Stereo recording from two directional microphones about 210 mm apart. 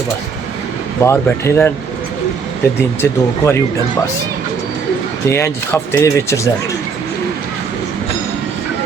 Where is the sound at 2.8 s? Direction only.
10° left (ahead or behind).